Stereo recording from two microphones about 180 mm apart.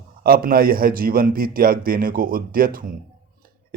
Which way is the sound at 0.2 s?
55° right (ahead or behind).